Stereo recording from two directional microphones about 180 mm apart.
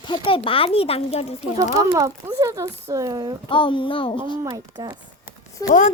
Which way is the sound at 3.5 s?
25° left (ahead or behind).